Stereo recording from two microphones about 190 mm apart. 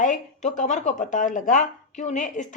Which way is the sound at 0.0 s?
40° left (ahead or behind).